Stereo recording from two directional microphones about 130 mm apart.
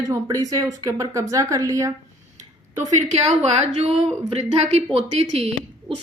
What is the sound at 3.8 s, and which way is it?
Speech, 55° right (ahead or behind).